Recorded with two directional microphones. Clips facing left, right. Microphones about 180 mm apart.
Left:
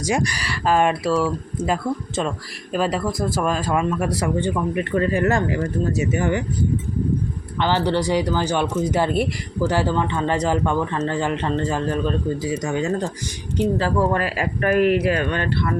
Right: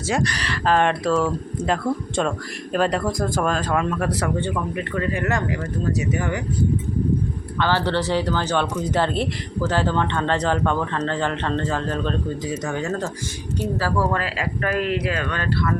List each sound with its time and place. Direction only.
0.0 s speech: 15° left (ahead or behind)
4.8 s speech: 30° left (ahead or behind)
7.6 s speech: 15° left (ahead or behind)